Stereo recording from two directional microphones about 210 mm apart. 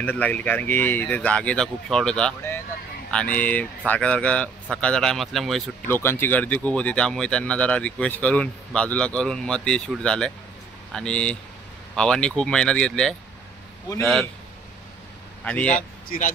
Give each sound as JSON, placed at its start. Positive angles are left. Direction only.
{"t": 0.0, "sound": "speech", "side_deg": 10}
{"t": 5.9, "sound": "speech", "side_deg": 10}
{"t": 15.4, "sound": "speech", "side_deg": 5}
{"t": 16.1, "sound": "speech", "side_deg": 40}